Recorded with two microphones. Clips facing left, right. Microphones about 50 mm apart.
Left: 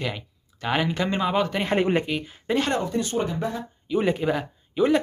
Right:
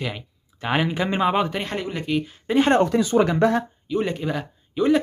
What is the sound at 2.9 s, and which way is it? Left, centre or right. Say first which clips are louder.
Speech: right 7 dB; right.